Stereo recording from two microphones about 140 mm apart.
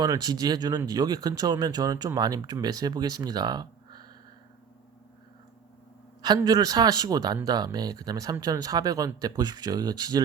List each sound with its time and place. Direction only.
0.0 s speech: 30° right (ahead or behind)
6.2 s speech: 30° right (ahead or behind)